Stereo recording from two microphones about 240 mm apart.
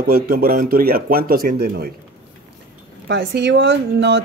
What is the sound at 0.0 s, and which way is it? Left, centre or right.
Speech, right.